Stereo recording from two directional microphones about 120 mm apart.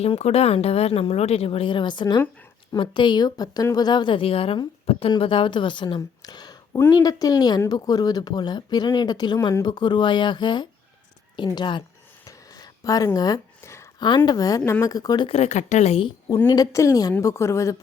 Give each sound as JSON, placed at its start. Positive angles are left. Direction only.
{"t": 0.0, "sound": "speech", "side_deg": 60}
{"t": 12.2, "sound": "a sound", "side_deg": 30}
{"t": 14.3, "sound": "speech", "side_deg": 30}
{"t": 15.3, "sound": "speech", "side_deg": 70}
{"t": 16.5, "sound": "a woman's voice", "side_deg": 30}